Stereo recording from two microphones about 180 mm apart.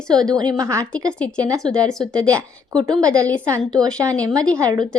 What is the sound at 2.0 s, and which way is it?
A woman's voice, 20° right (ahead or behind).